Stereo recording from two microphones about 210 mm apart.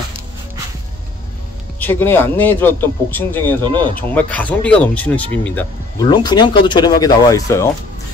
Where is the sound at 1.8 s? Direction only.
10° left (ahead or behind).